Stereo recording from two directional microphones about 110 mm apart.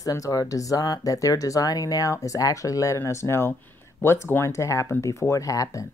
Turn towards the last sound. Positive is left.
turn(degrees=30)  # may be behind; listen again after turning